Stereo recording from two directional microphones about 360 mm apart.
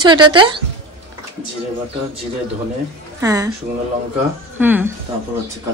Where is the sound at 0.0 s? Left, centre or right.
Centre.